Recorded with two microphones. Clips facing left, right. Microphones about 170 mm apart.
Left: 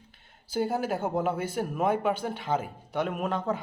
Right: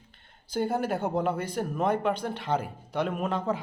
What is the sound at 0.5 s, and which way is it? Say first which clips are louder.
Speech: even; 5° left (ahead or behind).